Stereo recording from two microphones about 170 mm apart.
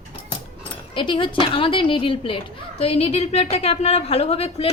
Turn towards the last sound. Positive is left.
turn(degrees=35)  # may be behind; listen again after turning